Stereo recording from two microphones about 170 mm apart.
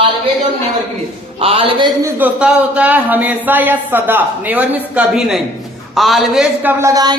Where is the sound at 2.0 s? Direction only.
10° right (ahead or behind).